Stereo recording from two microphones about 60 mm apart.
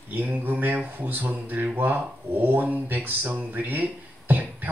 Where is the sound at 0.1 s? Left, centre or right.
Right.